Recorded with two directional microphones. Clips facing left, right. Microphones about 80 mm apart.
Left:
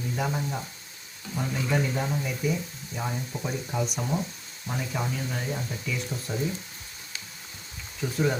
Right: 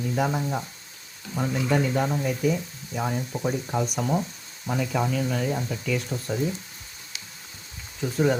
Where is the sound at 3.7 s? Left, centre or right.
Right.